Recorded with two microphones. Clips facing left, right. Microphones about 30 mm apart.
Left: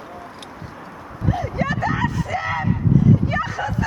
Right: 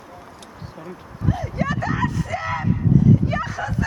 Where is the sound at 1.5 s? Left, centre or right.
Centre.